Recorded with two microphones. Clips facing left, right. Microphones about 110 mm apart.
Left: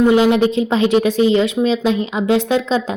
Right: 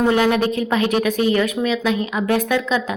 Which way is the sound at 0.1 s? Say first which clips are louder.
Left 4 dB; 20° left (ahead or behind).